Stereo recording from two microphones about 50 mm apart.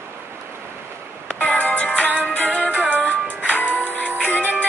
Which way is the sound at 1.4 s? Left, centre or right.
Left.